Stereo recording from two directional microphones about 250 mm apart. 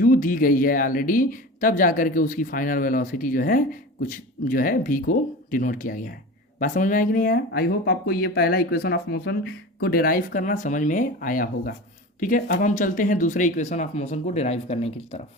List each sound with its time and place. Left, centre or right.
0.0 s speech: left